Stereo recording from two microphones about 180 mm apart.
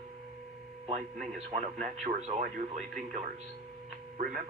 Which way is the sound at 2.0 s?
35° right (ahead or behind).